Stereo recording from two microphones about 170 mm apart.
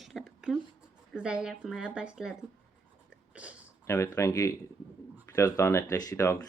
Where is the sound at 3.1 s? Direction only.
5° right (ahead or behind).